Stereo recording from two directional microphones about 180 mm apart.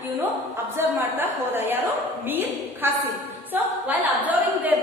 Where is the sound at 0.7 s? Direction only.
10° right (ahead or behind).